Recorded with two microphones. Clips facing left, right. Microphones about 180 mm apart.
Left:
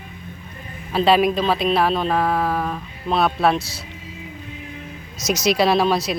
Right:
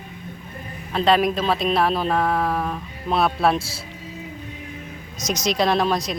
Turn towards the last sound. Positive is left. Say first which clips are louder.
# left 3 dB
turn(degrees=5)  # may be behind; listen again after turning